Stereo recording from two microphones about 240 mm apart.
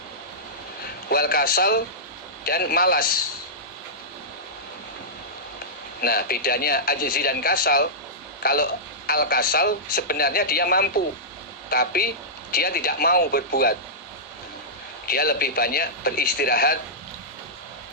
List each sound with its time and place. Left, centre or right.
1.1 s speech: left
6.0 s speech: left
15.0 s speech: left